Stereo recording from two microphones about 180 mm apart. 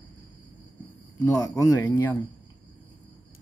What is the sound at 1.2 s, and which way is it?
Speech, 20° left (ahead or behind).